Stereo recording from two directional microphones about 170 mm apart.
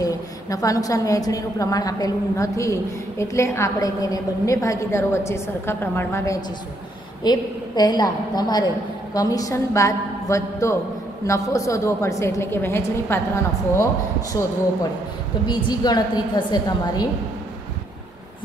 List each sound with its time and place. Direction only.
0.0 s a woman's voice: 20° left (ahead or behind)
15.4 s a woman's voice: 25° left (ahead or behind)